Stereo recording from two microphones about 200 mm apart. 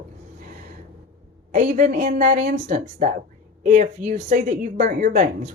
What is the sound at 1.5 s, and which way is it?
Speech, 40° right (ahead or behind).